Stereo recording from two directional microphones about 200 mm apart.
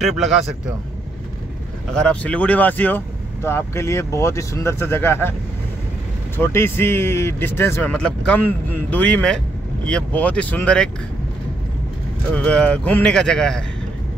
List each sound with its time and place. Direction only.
0.0 s a man's voice: centre (ahead or behind)
2.0 s speech: 5° left (ahead or behind)
6.3 s speech: 10° left (ahead or behind)
12.4 s a man's voice: 5° left (ahead or behind)